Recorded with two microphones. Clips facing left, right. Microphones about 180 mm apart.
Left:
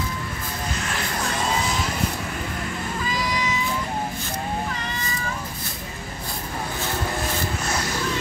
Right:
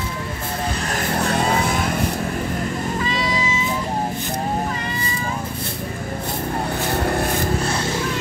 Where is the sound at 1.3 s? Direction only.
60° right (ahead or behind).